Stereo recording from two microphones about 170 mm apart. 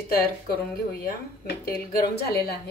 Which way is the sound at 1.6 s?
65° left (ahead or behind).